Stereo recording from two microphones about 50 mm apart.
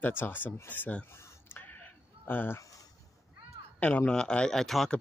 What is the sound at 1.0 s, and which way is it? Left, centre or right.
Speech, left.